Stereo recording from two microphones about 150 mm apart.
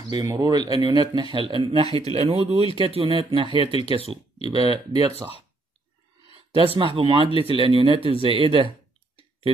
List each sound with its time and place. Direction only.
0.1 s speech: 25° right (ahead or behind)
6.3 s speech: 40° right (ahead or behind)